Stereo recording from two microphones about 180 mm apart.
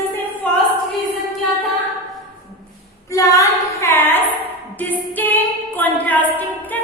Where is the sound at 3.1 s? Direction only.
20° left (ahead or behind).